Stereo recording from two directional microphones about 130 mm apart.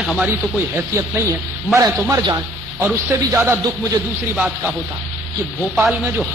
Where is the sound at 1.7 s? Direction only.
25° right (ahead or behind).